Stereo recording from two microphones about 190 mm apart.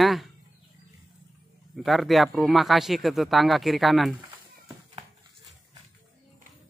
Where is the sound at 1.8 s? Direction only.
Centre (ahead or behind).